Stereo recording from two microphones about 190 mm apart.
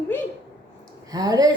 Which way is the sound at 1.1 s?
20° right (ahead or behind).